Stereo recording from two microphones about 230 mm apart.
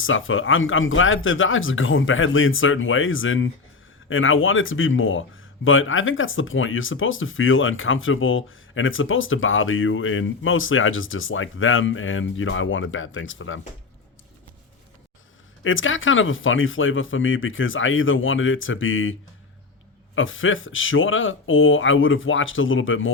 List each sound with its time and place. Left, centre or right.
0.0 s speech: left
15.6 s speech: left
20.1 s speech: left